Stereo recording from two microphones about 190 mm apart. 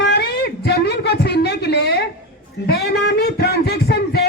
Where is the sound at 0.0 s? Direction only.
60° left (ahead or behind).